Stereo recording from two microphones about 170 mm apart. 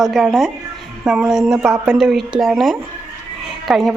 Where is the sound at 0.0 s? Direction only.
Centre (ahead or behind).